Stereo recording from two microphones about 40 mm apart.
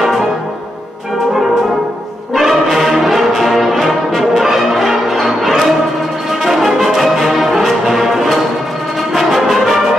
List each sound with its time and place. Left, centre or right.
2.3 s brass instrument: centre